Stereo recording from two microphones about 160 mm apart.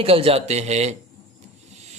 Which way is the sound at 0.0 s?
35° right (ahead or behind).